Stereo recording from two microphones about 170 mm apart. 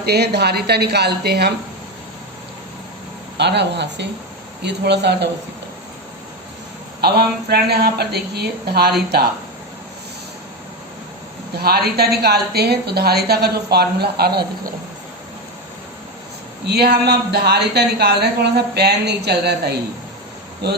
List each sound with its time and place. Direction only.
0.0 s a woman's voice: 75° right (ahead or behind)
3.3 s speech: 90° right
7.0 s a woman's voice: 70° right (ahead or behind)
11.6 s a woman's voice: 65° right (ahead or behind)
16.6 s a woman's voice: 70° right (ahead or behind)